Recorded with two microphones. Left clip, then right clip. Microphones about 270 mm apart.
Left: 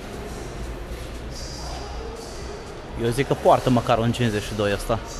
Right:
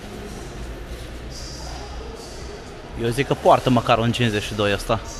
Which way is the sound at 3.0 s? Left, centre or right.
Centre.